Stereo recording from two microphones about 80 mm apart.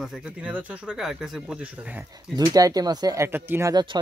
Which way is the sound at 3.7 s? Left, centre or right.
Right.